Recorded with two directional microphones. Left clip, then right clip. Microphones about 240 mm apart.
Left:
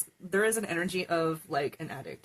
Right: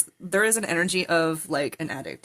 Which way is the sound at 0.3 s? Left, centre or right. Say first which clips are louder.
Right 5 dB; right.